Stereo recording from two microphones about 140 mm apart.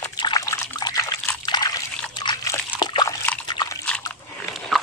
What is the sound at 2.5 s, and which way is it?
Splash, 30° left (ahead or behind).